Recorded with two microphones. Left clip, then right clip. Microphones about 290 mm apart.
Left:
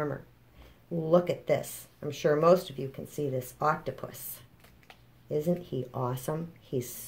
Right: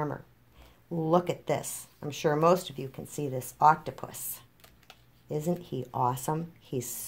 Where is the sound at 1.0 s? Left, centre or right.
Right.